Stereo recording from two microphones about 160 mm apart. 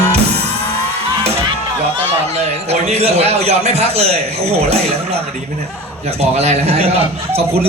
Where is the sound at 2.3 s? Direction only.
40° right (ahead or behind).